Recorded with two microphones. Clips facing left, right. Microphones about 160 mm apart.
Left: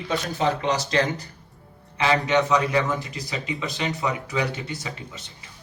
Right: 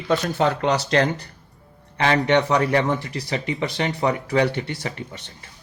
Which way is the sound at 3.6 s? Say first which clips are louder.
Right 4 dB; 60° right (ahead or behind).